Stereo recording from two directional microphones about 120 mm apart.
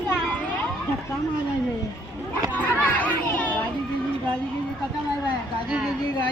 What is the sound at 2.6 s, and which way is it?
Speech, 15° left (ahead or behind).